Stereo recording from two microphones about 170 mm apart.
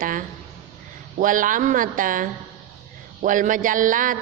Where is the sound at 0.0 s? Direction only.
50° right (ahead or behind).